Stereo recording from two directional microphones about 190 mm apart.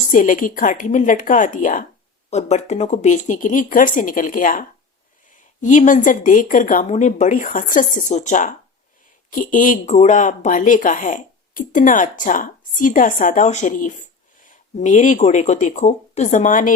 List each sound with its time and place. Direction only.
0.1 s speech: 45° left (ahead or behind)
5.6 s a woman's voice: 40° left (ahead or behind)